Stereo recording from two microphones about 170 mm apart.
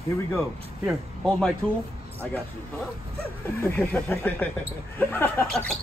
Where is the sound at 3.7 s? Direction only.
15° left (ahead or behind).